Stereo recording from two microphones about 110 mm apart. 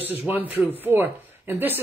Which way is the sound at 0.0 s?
10° right (ahead or behind).